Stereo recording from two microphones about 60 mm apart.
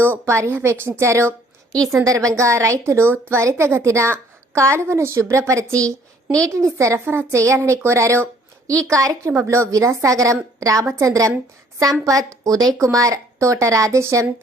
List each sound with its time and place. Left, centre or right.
0.0 s a woman's voice: right
2.0 s a woman's voice: right
7.0 s a woman's voice: right
8.6 s a woman's voice: right
12.8 s a woman's voice: right